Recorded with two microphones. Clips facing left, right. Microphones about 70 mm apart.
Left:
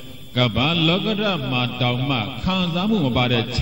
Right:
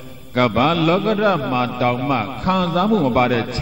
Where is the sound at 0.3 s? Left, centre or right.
Right.